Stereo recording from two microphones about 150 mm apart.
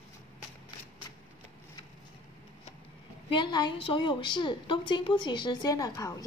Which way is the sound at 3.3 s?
30° left (ahead or behind).